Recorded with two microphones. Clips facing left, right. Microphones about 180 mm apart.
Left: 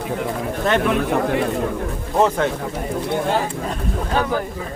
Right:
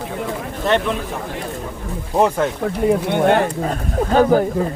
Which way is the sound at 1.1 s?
65° left (ahead or behind).